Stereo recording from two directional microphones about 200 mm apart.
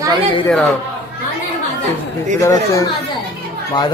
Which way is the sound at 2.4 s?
15° left (ahead or behind).